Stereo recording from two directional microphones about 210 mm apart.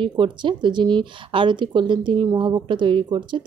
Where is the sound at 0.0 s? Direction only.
20° right (ahead or behind).